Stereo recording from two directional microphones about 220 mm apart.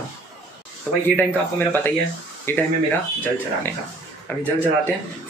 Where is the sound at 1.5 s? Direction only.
10° left (ahead or behind).